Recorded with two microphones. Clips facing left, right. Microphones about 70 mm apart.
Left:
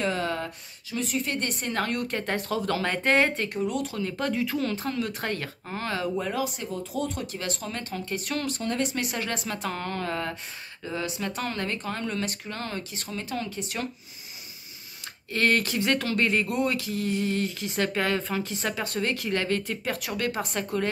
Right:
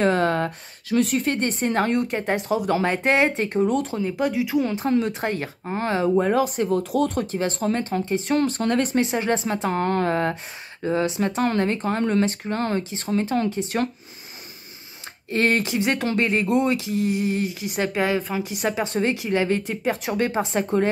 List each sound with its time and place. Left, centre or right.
0.0 s speech: right
1.2 s a woman's voice: right
4.2 s a woman's voice: centre; by 7.2 s right
7.2 s a woman's voice: right
8.5 s speech: right
8.9 s a woman's voice: right
15.3 s a woman's voice: right